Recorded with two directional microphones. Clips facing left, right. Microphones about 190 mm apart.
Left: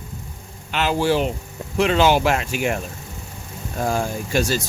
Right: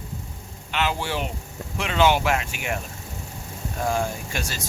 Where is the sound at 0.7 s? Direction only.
40° left (ahead or behind).